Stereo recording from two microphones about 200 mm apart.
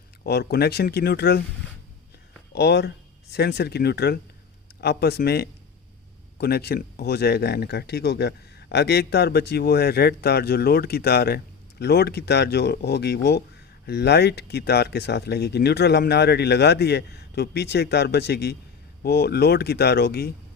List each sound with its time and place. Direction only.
0.3 s speech: 55° left (ahead or behind)
2.6 s speech: 55° left (ahead or behind)